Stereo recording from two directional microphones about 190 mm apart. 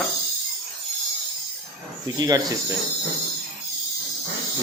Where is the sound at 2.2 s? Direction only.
20° right (ahead or behind).